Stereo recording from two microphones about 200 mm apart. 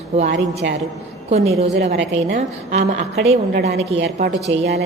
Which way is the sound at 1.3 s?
30° right (ahead or behind).